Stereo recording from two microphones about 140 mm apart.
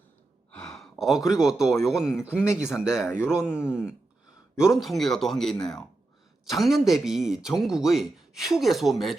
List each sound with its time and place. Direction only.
0.5 s gasp: centre (ahead or behind)
1.3 s speech: 5° right (ahead or behind)
2.5 s speech: 20° left (ahead or behind)
3.2 s speech: 5° right (ahead or behind)